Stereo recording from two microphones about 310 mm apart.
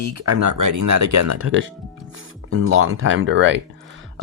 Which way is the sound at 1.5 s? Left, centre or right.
Right.